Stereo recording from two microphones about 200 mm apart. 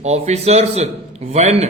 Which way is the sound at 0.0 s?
35° right (ahead or behind).